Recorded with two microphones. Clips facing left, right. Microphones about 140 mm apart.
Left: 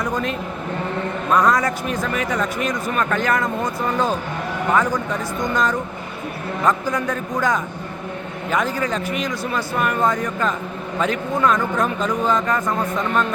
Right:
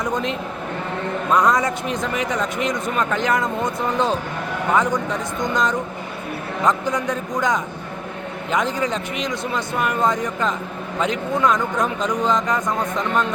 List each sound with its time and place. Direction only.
1.3 s speech: 20° right (ahead or behind)